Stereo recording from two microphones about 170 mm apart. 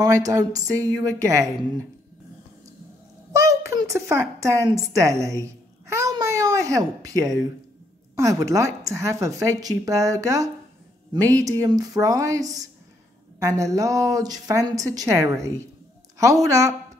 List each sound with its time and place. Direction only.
0.0 s speech: 20° right (ahead or behind)
3.3 s speech: 15° right (ahead or behind)